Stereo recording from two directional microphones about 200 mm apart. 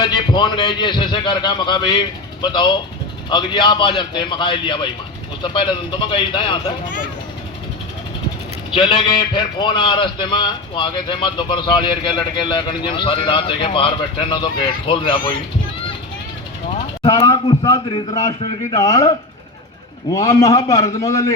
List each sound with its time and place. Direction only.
0.0 s a man's voice: 20° left (ahead or behind)
8.7 s a man's voice: 25° left (ahead or behind)
17.0 s a man's voice: 25° left (ahead or behind)
20.1 s a man's voice: 15° left (ahead or behind)